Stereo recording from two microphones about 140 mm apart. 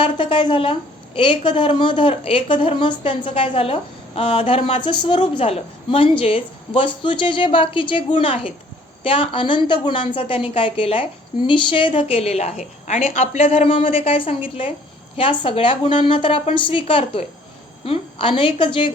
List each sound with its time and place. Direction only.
0.0 s a woman's voice: 40° left (ahead or behind)